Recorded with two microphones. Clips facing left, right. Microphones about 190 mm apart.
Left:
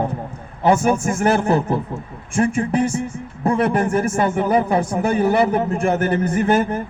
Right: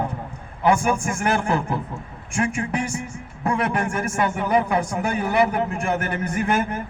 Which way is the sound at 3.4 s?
30° left (ahead or behind).